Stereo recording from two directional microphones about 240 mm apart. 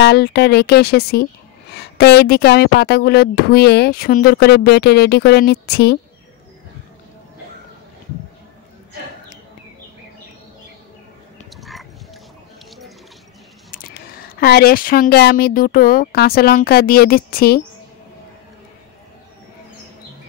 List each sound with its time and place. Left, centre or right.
0.0 s speech: left
11.5 s oink: centre
13.7 s speech: left